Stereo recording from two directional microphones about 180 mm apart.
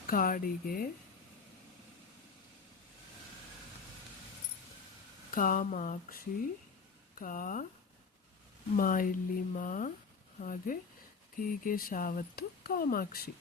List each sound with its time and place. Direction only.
0.1 s speech: 50° left (ahead or behind)
5.3 s speech: 50° left (ahead or behind)
8.7 s speech: 50° left (ahead or behind)